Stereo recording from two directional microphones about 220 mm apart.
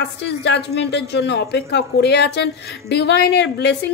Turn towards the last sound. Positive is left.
turn(degrees=50)  # may be behind; listen again after turning